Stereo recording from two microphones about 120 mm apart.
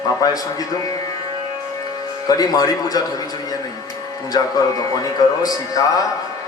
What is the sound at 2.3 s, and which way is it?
Speech, 30° left (ahead or behind).